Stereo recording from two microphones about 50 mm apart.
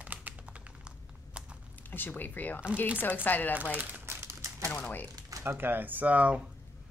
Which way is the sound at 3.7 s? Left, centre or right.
Right.